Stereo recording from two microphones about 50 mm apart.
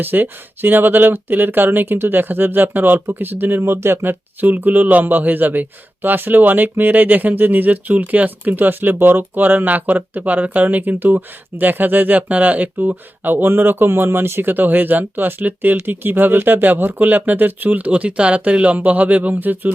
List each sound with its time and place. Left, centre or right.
0.0 s speech: right
3.6 s speech: right
4.0 s speech: right